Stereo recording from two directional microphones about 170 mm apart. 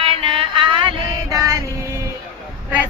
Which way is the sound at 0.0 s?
35° right (ahead or behind).